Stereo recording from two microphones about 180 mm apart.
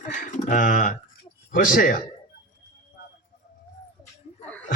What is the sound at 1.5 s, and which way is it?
Speech, 50° left (ahead or behind).